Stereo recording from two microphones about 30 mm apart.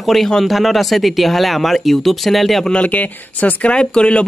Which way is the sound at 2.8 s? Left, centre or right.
Left.